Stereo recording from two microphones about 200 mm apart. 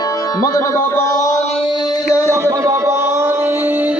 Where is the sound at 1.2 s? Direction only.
40° left (ahead or behind).